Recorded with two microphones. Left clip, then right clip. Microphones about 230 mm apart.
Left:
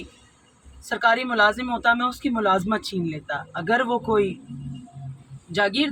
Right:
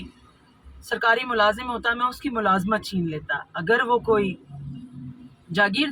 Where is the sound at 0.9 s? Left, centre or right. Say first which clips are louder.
Left 1 dB; centre.